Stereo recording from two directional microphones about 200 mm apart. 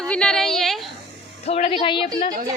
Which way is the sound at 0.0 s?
5° left (ahead or behind).